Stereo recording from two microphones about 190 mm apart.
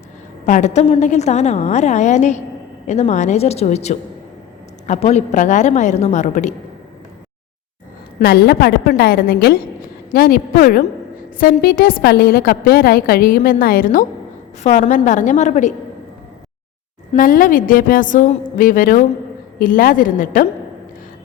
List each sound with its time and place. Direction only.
0.4 s a woman's voice: 40° left (ahead or behind)
8.2 s a woman's voice: 55° left (ahead or behind); by 15.7 s 40° left (ahead or behind)
17.2 s a woman's voice: 45° left (ahead or behind)